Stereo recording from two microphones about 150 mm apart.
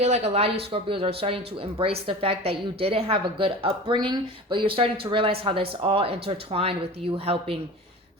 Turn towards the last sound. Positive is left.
turn(degrees=-40)  # may be behind; listen again after turning